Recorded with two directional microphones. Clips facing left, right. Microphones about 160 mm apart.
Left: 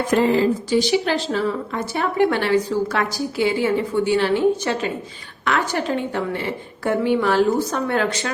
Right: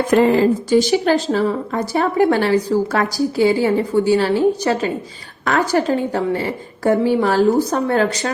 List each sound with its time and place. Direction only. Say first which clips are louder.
0.2 s a woman's voice: right 3 dB; 55° right (ahead or behind); by 8.3 s 40° right (ahead or behind)